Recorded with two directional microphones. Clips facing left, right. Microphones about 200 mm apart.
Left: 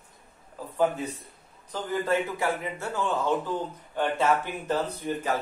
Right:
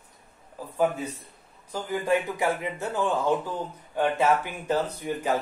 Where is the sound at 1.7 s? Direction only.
15° right (ahead or behind).